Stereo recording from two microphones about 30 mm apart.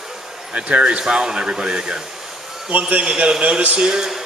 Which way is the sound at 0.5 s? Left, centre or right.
Right.